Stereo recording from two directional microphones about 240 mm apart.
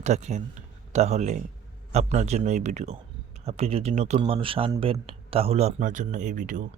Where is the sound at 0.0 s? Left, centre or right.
Right.